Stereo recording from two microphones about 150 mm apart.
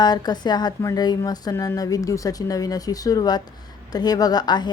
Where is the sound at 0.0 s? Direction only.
30° left (ahead or behind).